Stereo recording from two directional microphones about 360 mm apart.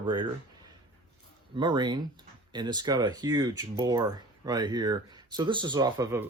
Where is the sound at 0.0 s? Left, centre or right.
Centre.